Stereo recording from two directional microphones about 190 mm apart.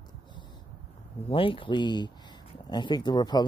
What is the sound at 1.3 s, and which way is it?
Speech, 25° left (ahead or behind).